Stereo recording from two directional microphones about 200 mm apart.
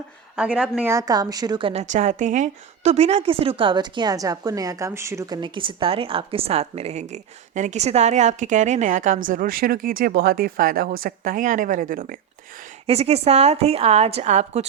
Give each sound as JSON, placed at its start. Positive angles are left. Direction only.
{"t": 0.3, "sound": "a woman's voice", "side_deg": -5}
{"t": 12.8, "sound": "a woman's voice", "side_deg": -30}